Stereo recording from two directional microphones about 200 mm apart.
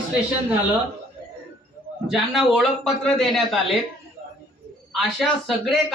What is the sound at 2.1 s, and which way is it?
A man's voice, centre (ahead or behind).